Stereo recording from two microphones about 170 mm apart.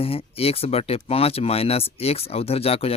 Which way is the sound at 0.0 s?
35° left (ahead or behind).